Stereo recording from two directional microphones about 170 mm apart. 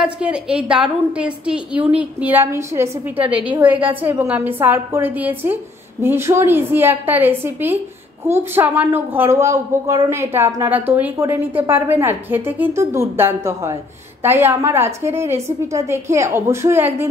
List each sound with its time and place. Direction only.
0.0 s a woman's voice: 5° right (ahead or behind)